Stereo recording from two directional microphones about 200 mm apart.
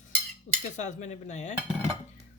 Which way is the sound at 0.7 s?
35° left (ahead or behind).